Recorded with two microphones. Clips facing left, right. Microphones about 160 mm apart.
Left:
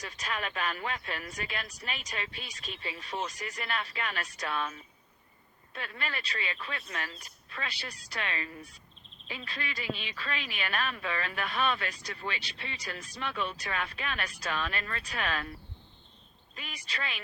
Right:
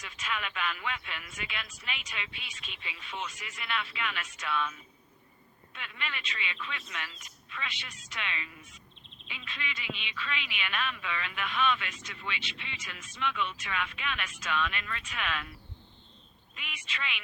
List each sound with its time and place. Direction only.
0.0 s speech: 40° left (ahead or behind)
16.6 s speech: 35° left (ahead or behind)